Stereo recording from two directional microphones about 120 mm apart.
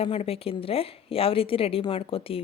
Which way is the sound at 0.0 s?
55° left (ahead or behind).